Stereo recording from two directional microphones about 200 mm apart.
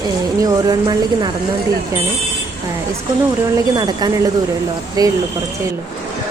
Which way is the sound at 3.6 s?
20° right (ahead or behind).